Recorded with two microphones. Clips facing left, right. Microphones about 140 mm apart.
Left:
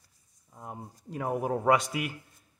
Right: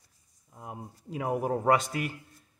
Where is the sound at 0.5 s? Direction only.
5° right (ahead or behind).